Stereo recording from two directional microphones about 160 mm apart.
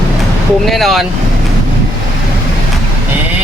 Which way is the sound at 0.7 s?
Centre (ahead or behind).